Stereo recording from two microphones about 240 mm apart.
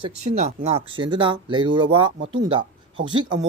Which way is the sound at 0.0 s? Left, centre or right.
Right.